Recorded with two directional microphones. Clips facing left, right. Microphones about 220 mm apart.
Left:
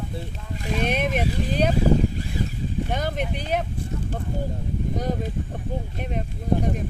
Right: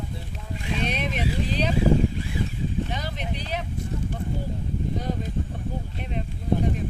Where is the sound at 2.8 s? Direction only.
50° left (ahead or behind).